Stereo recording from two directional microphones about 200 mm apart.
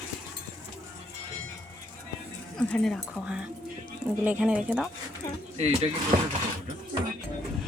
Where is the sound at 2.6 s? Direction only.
5° left (ahead or behind).